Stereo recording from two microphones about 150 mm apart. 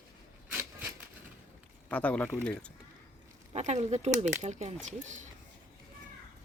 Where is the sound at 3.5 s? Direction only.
45° right (ahead or behind).